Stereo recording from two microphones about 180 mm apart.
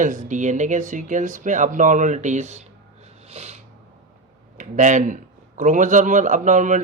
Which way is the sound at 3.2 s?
35° right (ahead or behind).